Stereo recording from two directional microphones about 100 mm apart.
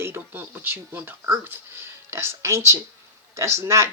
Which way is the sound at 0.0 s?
20° right (ahead or behind).